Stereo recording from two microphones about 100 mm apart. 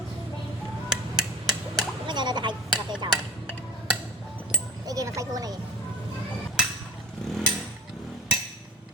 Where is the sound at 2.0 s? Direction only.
50° right (ahead or behind).